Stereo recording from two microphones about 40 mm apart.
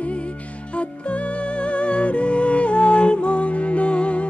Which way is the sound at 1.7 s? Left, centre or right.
Left.